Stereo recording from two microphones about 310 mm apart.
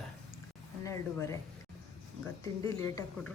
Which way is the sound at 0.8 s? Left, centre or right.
Centre.